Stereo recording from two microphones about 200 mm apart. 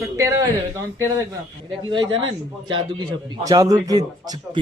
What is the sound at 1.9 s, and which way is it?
Speech, 25° right (ahead or behind).